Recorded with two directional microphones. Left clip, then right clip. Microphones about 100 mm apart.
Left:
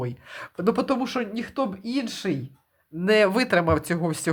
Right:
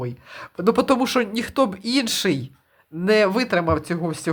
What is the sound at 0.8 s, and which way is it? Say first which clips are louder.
Speech: right 6 dB; 50° right (ahead or behind).